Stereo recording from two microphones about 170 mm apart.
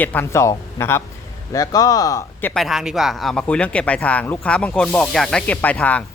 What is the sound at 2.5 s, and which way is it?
Speech, centre (ahead or behind).